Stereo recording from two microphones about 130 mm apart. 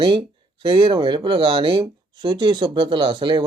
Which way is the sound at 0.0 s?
40° right (ahead or behind).